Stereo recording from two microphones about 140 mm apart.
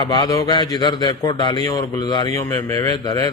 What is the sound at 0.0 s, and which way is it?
A man's voice, 35° left (ahead or behind).